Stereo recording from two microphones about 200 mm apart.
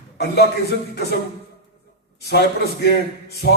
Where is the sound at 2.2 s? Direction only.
55° left (ahead or behind).